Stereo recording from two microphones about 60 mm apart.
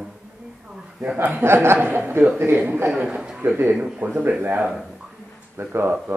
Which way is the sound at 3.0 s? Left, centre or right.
Centre.